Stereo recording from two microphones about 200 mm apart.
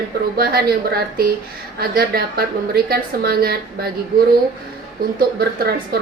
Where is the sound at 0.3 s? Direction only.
50° right (ahead or behind).